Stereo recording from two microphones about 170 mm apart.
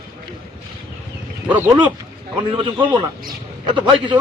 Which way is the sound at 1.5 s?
10° right (ahead or behind).